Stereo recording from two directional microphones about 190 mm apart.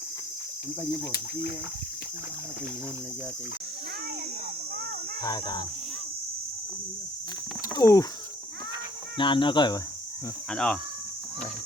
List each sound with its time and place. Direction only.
1.1 s speech: 55° left (ahead or behind)
5.2 s speech: 20° left (ahead or behind)
7.8 s speech: 20° left (ahead or behind)
9.1 s speech: 25° left (ahead or behind)
10.5 s speech: 5° left (ahead or behind)